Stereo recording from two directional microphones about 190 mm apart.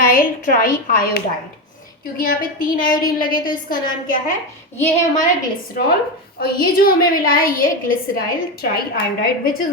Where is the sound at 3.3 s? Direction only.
20° left (ahead or behind).